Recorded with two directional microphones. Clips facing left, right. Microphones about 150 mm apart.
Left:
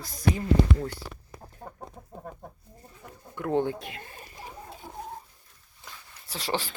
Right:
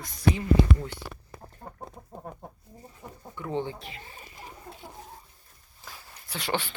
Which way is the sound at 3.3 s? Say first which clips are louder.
Left 5 dB; 50° left (ahead or behind).